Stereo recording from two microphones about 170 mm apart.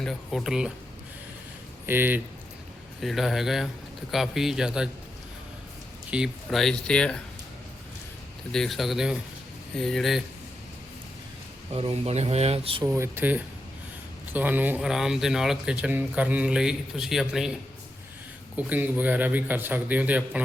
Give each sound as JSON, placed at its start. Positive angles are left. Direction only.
{"t": 0.0, "sound": "speech", "side_deg": 0}
{"t": 1.9, "sound": "a man's voice", "side_deg": -10}
{"t": 3.0, "sound": "speech", "side_deg": 0}
{"t": 6.1, "sound": "speech", "side_deg": -5}
{"t": 8.5, "sound": "speech", "side_deg": 0}
{"t": 11.7, "sound": "speech", "side_deg": -35}
{"t": 12.8, "sound": "a man's voice", "side_deg": -15}
{"t": 18.5, "sound": "a man's voice", "side_deg": -10}